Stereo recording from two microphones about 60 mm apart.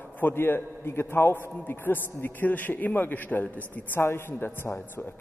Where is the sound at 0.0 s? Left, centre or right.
Left.